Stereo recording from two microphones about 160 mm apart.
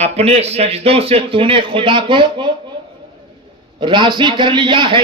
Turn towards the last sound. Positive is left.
turn(degrees=-30)  # may be behind; listen again after turning